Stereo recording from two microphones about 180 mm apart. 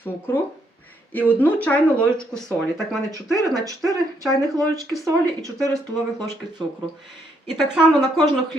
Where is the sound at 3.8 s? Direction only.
20° right (ahead or behind).